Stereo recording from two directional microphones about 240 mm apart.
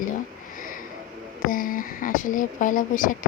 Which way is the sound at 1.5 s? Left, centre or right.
Left.